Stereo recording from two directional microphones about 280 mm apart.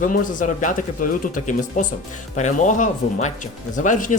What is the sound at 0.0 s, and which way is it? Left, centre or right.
Speech, left.